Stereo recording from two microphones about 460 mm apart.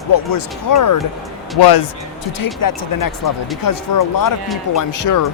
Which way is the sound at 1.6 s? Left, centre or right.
Left.